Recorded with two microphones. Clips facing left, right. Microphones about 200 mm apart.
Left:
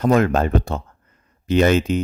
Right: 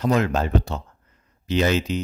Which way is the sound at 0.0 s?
50° left (ahead or behind).